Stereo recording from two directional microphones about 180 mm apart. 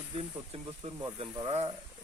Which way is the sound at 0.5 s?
35° right (ahead or behind).